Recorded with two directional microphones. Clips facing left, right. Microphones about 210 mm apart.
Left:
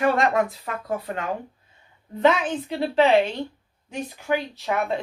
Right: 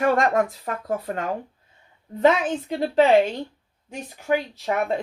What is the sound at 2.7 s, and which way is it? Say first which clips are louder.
Speech: right 1 dB; 45° right (ahead or behind).